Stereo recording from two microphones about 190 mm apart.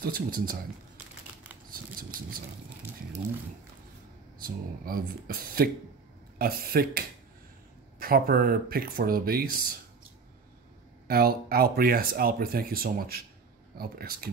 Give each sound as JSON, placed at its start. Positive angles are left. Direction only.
{"t": 0.0, "sound": "speech", "side_deg": -50}
{"t": 4.4, "sound": "speech", "side_deg": -50}
{"t": 11.1, "sound": "speech", "side_deg": -55}